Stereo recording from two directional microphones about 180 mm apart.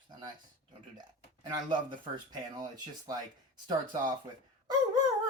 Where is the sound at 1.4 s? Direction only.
25° right (ahead or behind).